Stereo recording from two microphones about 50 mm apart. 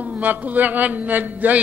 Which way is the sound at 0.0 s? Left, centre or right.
Right.